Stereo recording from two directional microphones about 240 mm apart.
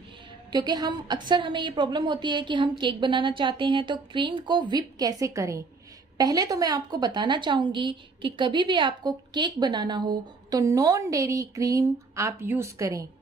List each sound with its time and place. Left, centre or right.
0.5 s a woman's voice: centre